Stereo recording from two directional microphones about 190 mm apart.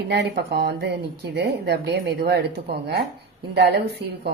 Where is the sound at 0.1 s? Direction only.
60° right (ahead or behind).